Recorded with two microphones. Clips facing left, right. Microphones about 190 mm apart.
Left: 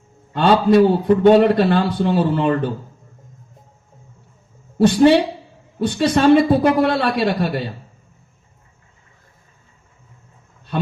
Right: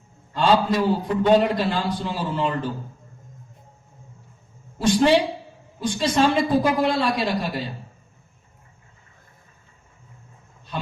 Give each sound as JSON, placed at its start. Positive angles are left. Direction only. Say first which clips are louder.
{"t": 0.3, "sound": "a man's voice", "louder": "left 6 dB", "side_deg": 60}
{"t": 4.8, "sound": "a man's voice", "louder": "left 5 dB", "side_deg": 60}